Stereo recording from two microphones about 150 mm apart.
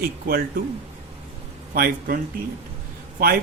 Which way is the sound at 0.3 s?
80° right.